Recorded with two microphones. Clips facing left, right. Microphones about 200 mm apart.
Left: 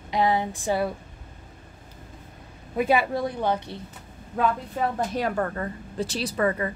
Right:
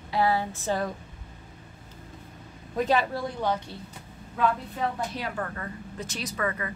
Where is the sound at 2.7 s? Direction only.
10° left (ahead or behind).